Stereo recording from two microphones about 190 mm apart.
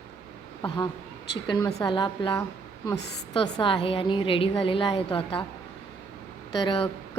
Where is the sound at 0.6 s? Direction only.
25° left (ahead or behind).